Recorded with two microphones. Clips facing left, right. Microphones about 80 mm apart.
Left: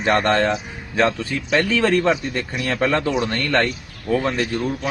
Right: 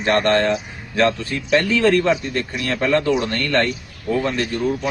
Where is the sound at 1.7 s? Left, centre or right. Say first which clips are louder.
Right 1 dB; left.